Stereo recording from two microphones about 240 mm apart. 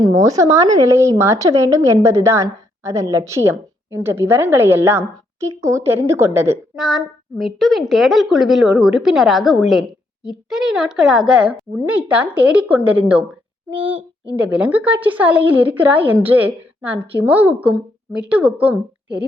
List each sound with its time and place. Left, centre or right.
0.0 s a woman's voice: centre
13.7 s speech: right
14.3 s a woman's voice: centre